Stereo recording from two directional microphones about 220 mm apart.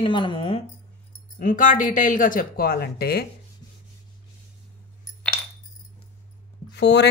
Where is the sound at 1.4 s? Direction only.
35° left (ahead or behind).